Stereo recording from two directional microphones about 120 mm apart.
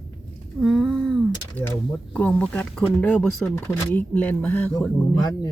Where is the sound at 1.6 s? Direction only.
10° left (ahead or behind).